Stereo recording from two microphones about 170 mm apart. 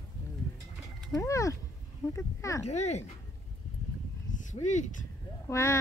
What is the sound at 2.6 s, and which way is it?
Speech, 40° left (ahead or behind).